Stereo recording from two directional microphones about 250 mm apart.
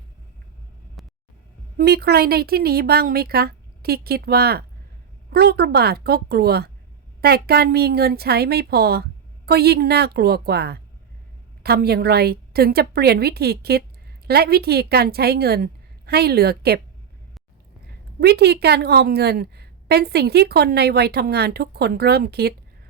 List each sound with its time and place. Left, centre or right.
1.0 s vehicle: centre
1.8 s a woman's voice: right
18.2 s a woman's voice: right